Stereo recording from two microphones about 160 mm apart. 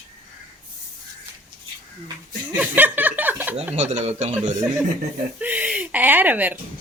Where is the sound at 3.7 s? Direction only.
45° right (ahead or behind).